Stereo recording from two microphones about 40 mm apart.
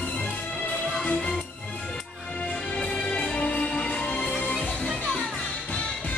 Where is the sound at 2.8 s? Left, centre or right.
Left.